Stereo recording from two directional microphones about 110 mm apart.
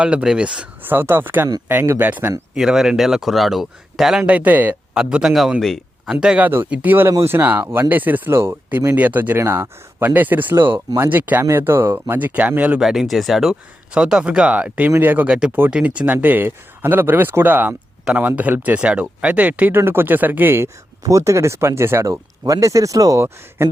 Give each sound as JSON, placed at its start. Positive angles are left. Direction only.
{"t": 0.0, "sound": "speech", "side_deg": -10}
{"t": 2.6, "sound": "speech", "side_deg": -5}
{"t": 6.1, "sound": "speech", "side_deg": -10}
{"t": 12.8, "sound": "speech", "side_deg": -5}
{"t": 21.0, "sound": "speech", "side_deg": -30}